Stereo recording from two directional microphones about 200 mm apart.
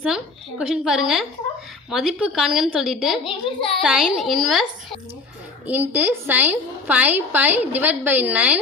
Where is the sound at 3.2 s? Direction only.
25° left (ahead or behind).